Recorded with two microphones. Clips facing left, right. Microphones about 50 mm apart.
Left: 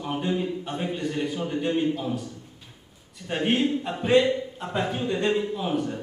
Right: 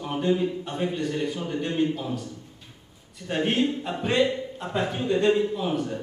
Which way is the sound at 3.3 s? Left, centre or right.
Centre.